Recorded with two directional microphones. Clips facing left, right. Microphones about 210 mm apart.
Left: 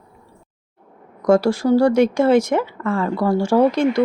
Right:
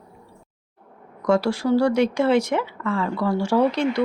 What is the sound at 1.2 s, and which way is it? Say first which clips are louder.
Speech: left 5 dB; 45° left (ahead or behind).